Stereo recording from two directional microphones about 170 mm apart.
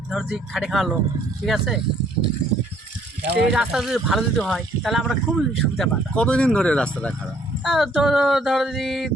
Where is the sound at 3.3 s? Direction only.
75° right (ahead or behind).